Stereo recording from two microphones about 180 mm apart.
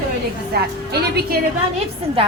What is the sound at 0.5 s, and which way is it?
Speech, 60° right (ahead or behind).